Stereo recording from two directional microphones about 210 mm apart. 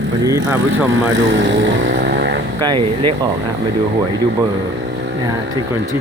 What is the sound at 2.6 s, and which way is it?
Speech, 20° right (ahead or behind).